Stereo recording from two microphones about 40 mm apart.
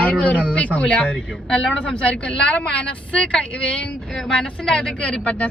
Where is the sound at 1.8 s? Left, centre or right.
Left.